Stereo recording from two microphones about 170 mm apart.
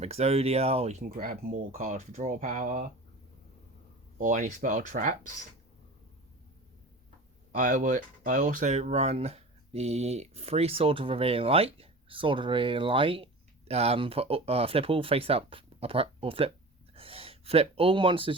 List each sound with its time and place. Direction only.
0.0 s speech: 40° right (ahead or behind)
4.2 s speech: 50° right (ahead or behind)
7.5 s speech: 50° right (ahead or behind); by 18.3 s 30° right (ahead or behind)